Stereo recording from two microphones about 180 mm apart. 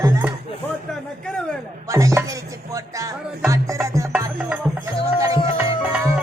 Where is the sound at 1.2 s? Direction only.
5° left (ahead or behind).